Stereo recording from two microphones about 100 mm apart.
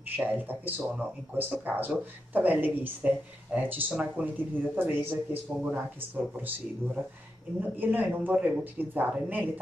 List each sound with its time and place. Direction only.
0.1 s speech: 15° right (ahead or behind)
7.7 s speech: 20° right (ahead or behind)